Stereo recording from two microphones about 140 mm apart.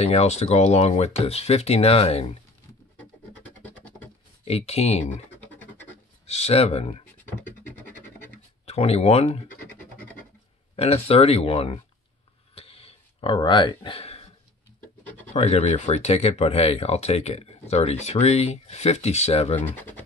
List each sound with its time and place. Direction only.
0.0 s speech: 50° left (ahead or behind)
4.5 s speech: 50° left (ahead or behind)
6.2 s speech: 50° left (ahead or behind)
8.6 s speech: 45° left (ahead or behind)
10.8 s speech: 45° left (ahead or behind)
12.5 s a sound: 40° left (ahead or behind)
15.0 s pigeon: 10° left (ahead or behind)
15.3 s speech: 50° left (ahead or behind)
19.5 s speech: 15° left (ahead or behind)